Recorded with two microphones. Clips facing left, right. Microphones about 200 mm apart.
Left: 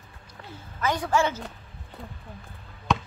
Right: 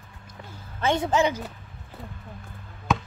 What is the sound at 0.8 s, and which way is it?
Speech, 25° right (ahead or behind).